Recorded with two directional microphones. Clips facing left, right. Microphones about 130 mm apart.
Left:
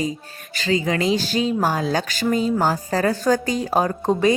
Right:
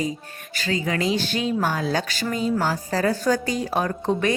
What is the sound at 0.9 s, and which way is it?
Speech, 30° left (ahead or behind).